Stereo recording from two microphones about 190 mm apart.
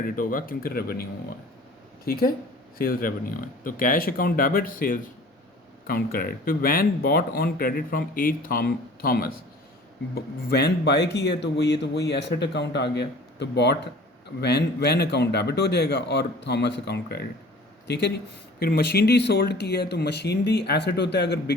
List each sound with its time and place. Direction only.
0.0 s speech: 45° left (ahead or behind)
2.0 s speech: 50° left (ahead or behind)